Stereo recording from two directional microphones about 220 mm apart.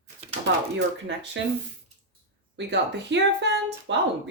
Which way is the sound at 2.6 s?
50° right (ahead or behind).